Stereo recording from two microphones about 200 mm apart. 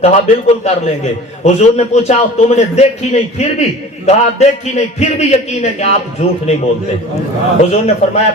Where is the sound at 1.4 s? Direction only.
35° left (ahead or behind).